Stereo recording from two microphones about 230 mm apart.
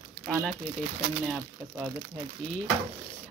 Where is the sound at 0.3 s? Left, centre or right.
Centre.